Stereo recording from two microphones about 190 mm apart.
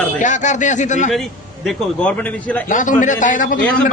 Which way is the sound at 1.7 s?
5° left (ahead or behind).